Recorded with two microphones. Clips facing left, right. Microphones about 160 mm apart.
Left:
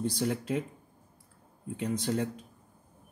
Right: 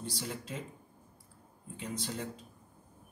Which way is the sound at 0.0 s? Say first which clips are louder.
Left 10 dB; 55° left (ahead or behind).